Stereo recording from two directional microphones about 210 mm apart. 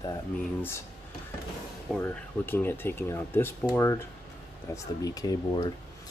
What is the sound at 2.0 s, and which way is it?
Speech, 10° left (ahead or behind).